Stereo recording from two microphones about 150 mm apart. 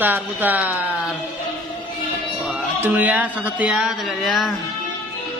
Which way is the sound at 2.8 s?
10° right (ahead or behind).